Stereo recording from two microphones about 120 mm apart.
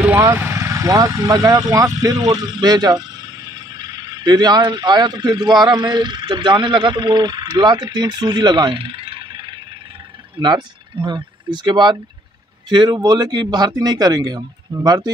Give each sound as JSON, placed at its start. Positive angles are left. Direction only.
{"t": 0.0, "sound": "speech", "side_deg": -15}